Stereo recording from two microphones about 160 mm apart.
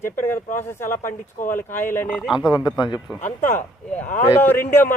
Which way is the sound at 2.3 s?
25° left (ahead or behind).